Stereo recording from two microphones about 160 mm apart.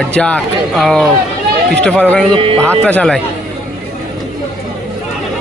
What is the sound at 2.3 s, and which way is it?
Speech, 35° right (ahead or behind).